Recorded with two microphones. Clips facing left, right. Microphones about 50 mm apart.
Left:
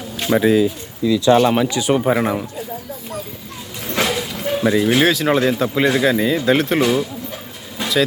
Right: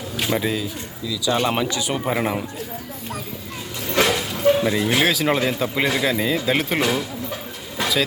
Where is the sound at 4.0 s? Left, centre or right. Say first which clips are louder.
Right 1 dB; centre.